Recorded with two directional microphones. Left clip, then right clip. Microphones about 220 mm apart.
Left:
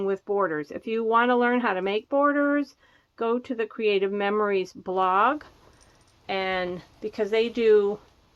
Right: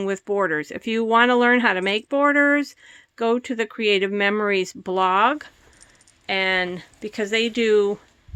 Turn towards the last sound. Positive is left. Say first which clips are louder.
# right 1 dB
turn(degrees=-50)  # may be behind; listen again after turning